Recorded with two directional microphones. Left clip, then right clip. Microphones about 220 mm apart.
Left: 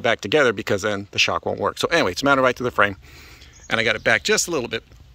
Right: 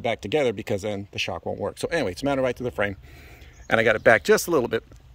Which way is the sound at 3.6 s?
20° right (ahead or behind).